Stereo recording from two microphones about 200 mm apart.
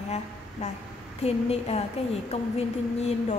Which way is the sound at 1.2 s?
30° left (ahead or behind).